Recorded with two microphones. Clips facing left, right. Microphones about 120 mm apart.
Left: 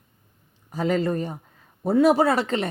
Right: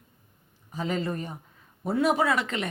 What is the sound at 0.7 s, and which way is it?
Speech, 40° left (ahead or behind).